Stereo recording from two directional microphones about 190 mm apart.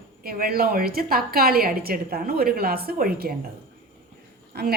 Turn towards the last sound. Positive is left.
turn(degrees=-55)  # may be behind; listen again after turning